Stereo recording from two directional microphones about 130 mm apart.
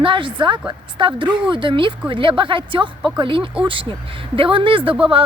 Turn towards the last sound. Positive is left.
turn(degrees=-40)  # may be behind; listen again after turning